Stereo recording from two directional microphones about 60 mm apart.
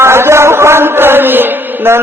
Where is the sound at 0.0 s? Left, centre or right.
Right.